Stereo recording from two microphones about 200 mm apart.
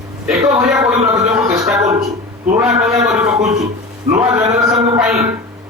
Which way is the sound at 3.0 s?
5° right (ahead or behind).